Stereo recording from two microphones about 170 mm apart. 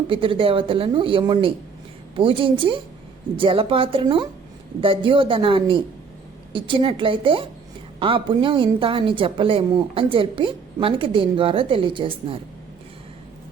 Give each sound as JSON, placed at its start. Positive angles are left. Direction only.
{"t": 0.1, "sound": "a woman's voice", "side_deg": -30}